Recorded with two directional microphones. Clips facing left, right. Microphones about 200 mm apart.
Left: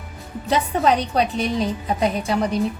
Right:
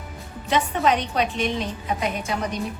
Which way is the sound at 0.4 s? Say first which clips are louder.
Left 2 dB; 35° left (ahead or behind).